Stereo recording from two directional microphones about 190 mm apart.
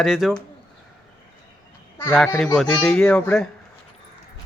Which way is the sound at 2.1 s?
5° left (ahead or behind).